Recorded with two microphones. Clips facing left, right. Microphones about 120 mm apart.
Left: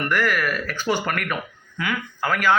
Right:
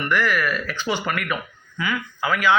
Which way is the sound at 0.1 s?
45° left (ahead or behind).